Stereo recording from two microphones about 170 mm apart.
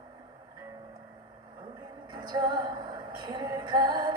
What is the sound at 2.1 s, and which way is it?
Music, 25° right (ahead or behind).